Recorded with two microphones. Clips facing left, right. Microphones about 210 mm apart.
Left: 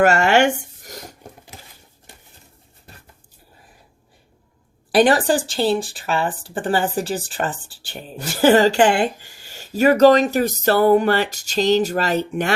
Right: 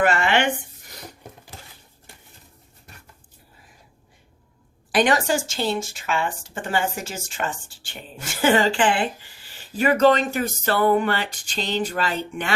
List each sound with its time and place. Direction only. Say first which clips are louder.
0.0 s speech: left 5 dB; 45° left (ahead or behind)
5.0 s a woman's voice: left 4 dB; 35° left (ahead or behind)